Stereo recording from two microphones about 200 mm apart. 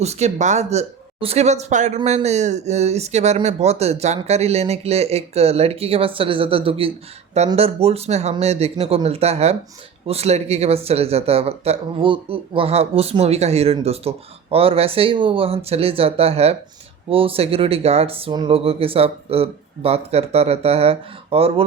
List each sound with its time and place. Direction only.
0.0 s speech: 35° right (ahead or behind)